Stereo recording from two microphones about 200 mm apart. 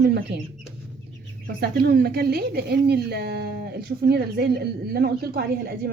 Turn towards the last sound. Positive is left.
turn(degrees=-50)  # may be behind; listen again after turning